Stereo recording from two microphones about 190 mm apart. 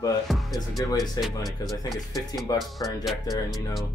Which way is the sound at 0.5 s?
20° left (ahead or behind).